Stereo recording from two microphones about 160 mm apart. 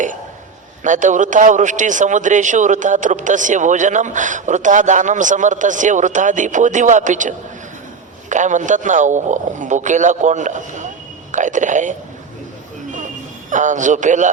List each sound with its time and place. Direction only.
0.9 s a man's voice: 50° right (ahead or behind)
13.5 s a man's voice: 50° right (ahead or behind)